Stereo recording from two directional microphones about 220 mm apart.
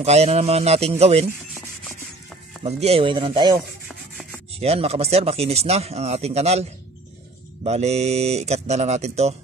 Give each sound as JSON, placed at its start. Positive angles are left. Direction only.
{"t": 0.0, "sound": "speech", "side_deg": -30}
{"t": 2.6, "sound": "speech", "side_deg": -30}